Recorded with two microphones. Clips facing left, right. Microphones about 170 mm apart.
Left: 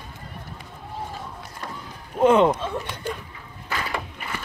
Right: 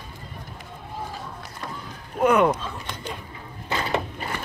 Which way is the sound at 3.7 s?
25° right (ahead or behind).